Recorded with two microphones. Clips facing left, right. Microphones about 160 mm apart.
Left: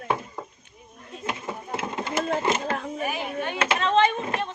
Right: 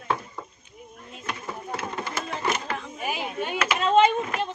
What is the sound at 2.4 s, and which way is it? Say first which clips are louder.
Speech: left 3 dB; 25° left (ahead or behind).